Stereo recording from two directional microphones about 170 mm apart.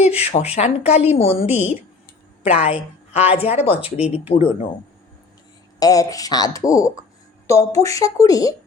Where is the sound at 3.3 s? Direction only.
35° left (ahead or behind).